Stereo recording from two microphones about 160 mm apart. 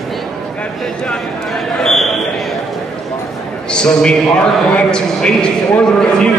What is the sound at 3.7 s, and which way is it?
A man's voice, 5° left (ahead or behind).